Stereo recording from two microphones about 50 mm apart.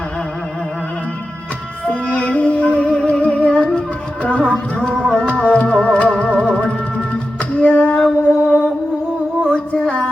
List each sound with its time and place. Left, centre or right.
2.0 s music: left
7.5 s female singing: left
7.9 s music: left
9.7 s a sound: left